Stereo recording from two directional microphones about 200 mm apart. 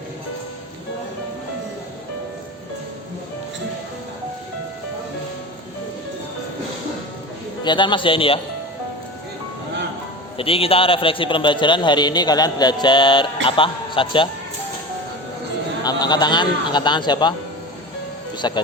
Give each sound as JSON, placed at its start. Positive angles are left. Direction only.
{"t": 7.6, "sound": "a man's voice", "side_deg": 25}
{"t": 10.3, "sound": "a man's voice", "side_deg": 30}
{"t": 15.8, "sound": "a man's voice", "side_deg": 20}
{"t": 18.4, "sound": "a man's voice", "side_deg": 20}